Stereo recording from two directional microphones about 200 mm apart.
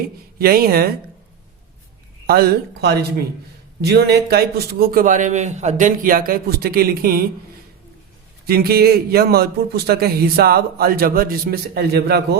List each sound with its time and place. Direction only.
0.3 s a man's voice: 50° right (ahead or behind)
2.2 s a man's voice: 50° right (ahead or behind)
8.4 s a man's voice: 50° right (ahead or behind)